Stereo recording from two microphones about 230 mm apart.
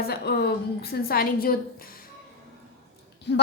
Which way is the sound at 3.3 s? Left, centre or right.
Left.